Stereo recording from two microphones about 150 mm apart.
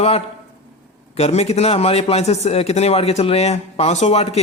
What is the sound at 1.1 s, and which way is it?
A man's voice, 45° left (ahead or behind).